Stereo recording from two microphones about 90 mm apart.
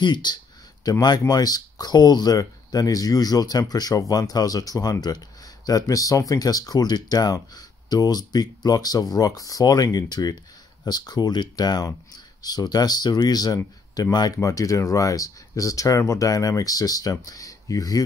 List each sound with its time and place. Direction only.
0.0 s speech: 55° left (ahead or behind)